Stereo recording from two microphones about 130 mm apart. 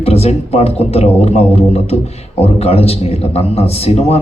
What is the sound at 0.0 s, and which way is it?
A man's voice, 50° left (ahead or behind).